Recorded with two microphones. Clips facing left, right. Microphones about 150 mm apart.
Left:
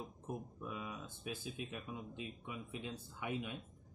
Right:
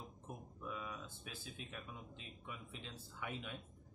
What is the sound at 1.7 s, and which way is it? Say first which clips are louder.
Speech: left 5 dB; 15° left (ahead or behind).